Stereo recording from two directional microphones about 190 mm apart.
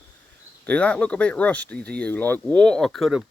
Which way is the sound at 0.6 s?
5° left (ahead or behind).